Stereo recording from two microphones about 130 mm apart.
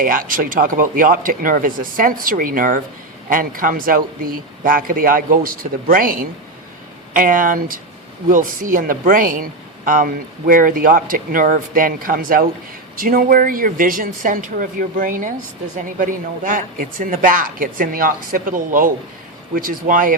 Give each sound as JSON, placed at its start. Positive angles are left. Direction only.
{"t": 0.0, "sound": "a man's voice", "side_deg": -90}